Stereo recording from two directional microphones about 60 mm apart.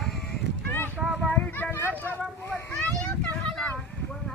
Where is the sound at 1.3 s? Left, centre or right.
Left.